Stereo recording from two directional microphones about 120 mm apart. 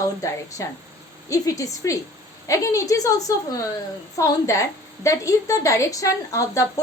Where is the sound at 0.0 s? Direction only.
25° left (ahead or behind).